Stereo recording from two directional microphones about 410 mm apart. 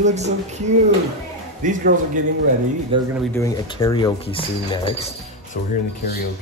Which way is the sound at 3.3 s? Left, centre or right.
Centre.